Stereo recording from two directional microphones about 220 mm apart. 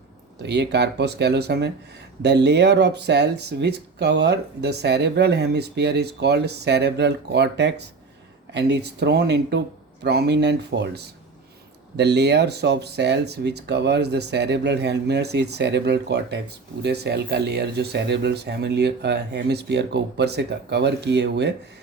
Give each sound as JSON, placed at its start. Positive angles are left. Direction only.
{"t": 0.4, "sound": "speech", "side_deg": -50}